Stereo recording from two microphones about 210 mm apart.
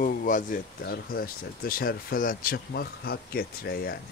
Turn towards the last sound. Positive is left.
turn(degrees=50)  # may be behind; listen again after turning